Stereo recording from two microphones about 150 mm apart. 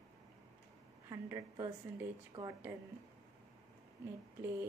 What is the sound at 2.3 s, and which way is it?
Speech, 40° right (ahead or behind).